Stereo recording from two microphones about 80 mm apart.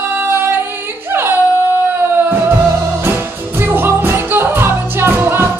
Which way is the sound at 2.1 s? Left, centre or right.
Right.